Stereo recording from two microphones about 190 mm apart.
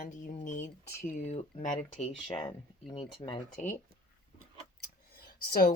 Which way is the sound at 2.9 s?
25° left (ahead or behind).